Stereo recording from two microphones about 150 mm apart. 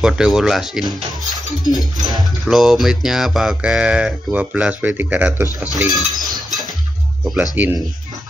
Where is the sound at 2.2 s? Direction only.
Centre (ahead or behind).